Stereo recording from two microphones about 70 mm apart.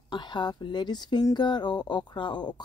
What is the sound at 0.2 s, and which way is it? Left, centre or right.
Speech, left.